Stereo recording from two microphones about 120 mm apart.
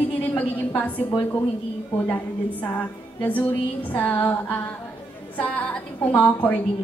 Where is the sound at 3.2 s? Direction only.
15° left (ahead or behind).